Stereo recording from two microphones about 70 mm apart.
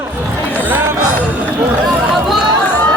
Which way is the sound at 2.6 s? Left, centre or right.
Left.